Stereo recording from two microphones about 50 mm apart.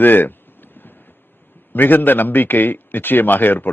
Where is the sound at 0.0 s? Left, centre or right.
Left.